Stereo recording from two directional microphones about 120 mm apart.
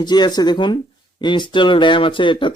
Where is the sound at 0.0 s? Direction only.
35° left (ahead or behind).